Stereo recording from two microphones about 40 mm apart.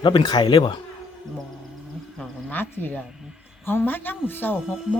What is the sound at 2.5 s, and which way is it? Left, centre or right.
Speech, left.